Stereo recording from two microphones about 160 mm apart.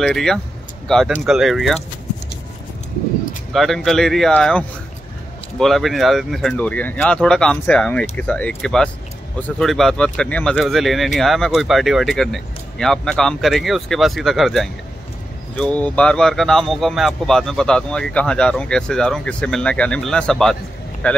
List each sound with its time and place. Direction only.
0.0 s speech: centre (ahead or behind)
3.5 s speech: centre (ahead or behind)